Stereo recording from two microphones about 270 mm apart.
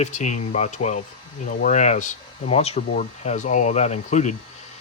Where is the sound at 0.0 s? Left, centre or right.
Left.